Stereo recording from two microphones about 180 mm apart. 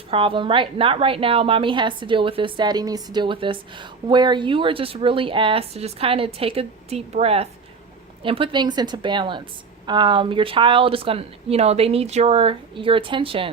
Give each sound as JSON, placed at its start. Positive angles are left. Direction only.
{"t": 0.1, "sound": "a woman's voice", "side_deg": -30}